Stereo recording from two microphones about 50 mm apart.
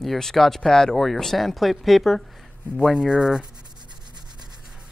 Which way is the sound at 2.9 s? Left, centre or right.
Centre.